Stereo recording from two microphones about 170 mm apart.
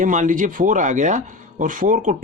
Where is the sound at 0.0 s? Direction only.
50° right (ahead or behind).